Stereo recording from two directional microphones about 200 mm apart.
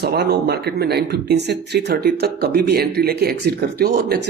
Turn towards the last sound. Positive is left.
turn(degrees=-55)  # may be behind; listen again after turning